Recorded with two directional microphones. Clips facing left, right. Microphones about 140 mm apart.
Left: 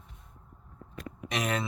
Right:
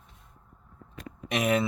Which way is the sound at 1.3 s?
10° right (ahead or behind).